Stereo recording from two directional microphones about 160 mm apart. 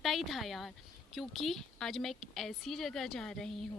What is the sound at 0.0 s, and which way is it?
A woman's voice, centre (ahead or behind).